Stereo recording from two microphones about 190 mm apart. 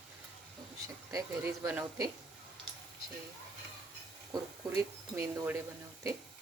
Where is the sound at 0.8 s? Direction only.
15° right (ahead or behind).